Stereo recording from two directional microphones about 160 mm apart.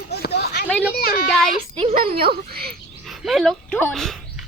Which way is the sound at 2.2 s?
75° right (ahead or behind).